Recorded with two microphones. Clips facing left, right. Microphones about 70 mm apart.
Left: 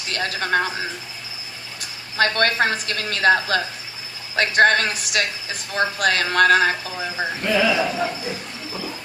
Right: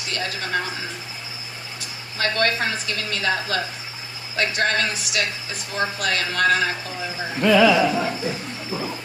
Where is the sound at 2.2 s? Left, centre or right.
Left.